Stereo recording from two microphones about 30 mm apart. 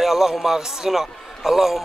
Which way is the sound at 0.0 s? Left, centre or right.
Centre.